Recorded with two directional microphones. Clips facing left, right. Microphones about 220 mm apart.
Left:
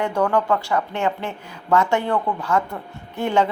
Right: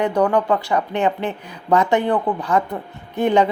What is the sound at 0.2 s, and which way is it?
Speech, 15° right (ahead or behind).